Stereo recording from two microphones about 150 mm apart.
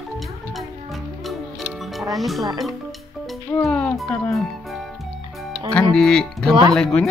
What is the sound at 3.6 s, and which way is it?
Speech, 5° left (ahead or behind).